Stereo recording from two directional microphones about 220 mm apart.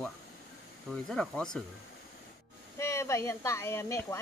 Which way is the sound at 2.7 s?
15° left (ahead or behind).